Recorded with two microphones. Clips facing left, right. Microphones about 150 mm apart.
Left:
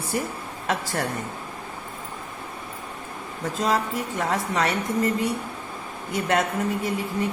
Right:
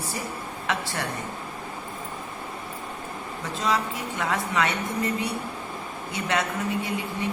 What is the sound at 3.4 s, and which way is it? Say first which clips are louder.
Speech: left 3 dB; 45° left (ahead or behind).